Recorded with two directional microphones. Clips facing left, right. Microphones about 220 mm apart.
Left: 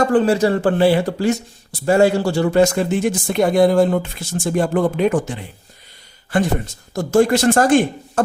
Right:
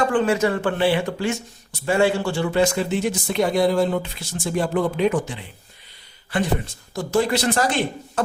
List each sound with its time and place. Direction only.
0.0 s speech: 35° left (ahead or behind)